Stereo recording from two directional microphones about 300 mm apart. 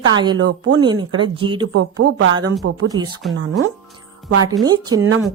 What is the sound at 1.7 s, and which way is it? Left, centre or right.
Speech, right.